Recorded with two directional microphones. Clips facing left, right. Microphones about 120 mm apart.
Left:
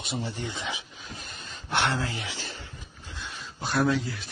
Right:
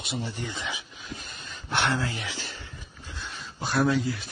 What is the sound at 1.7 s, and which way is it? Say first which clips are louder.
Speech: even; 25° left (ahead or behind).